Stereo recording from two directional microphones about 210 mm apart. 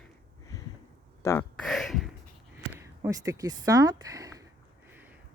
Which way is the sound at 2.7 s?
15° right (ahead or behind).